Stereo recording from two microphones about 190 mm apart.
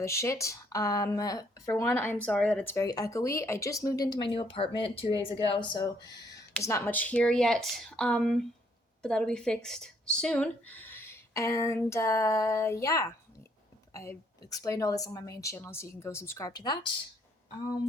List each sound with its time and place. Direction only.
0.0 s speech: 15° left (ahead or behind)
6.7 s speech: 10° left (ahead or behind)